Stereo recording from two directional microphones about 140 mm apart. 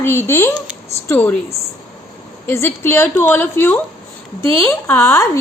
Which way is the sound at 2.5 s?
15° left (ahead or behind).